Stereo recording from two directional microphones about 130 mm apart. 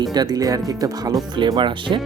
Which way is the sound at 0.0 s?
30° right (ahead or behind).